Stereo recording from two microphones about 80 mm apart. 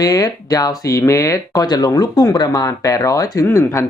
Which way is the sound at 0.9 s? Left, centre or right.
Left.